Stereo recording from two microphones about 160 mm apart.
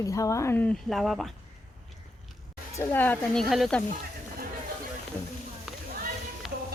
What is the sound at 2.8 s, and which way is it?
Speech, 10° left (ahead or behind).